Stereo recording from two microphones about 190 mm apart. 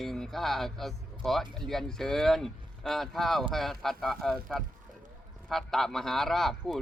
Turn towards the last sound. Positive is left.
turn(degrees=0)  # may be behind; listen again after turning